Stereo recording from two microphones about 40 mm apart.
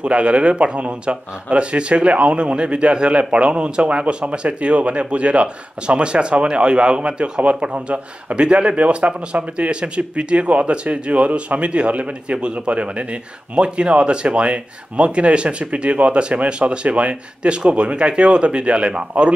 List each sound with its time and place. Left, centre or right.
0.0 s a man's voice: right